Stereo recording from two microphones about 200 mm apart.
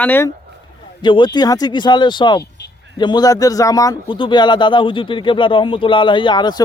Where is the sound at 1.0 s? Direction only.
25° left (ahead or behind).